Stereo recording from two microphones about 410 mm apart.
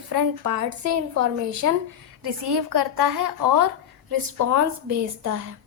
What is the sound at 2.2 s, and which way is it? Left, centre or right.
A woman's voice, right.